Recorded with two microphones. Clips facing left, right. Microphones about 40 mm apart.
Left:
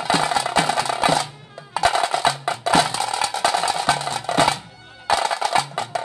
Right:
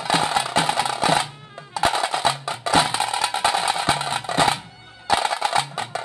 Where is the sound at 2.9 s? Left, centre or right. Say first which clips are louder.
Even; right.